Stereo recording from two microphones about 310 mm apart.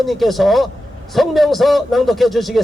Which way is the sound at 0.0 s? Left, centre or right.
Centre.